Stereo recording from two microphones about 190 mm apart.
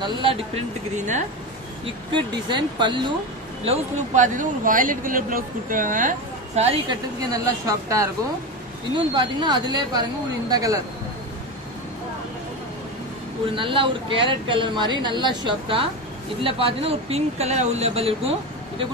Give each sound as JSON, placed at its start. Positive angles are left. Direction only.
{"t": 0.0, "sound": "a woman's voice", "side_deg": -25}
{"t": 0.9, "sound": "speech", "side_deg": -40}
{"t": 2.1, "sound": "a woman's voice", "side_deg": -25}
{"t": 3.6, "sound": "speech", "side_deg": -35}
{"t": 7.2, "sound": "a woman's voice", "side_deg": -15}
{"t": 13.6, "sound": "a woman's voice", "side_deg": -25}